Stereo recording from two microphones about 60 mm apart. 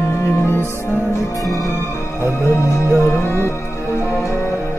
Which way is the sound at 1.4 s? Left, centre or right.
Left.